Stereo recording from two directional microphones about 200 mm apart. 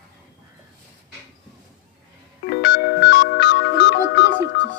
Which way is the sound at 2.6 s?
60° left (ahead or behind).